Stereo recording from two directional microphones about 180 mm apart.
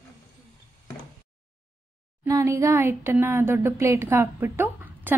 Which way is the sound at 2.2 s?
15° right (ahead or behind).